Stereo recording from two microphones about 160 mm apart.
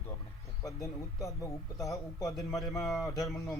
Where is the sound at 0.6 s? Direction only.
20° left (ahead or behind).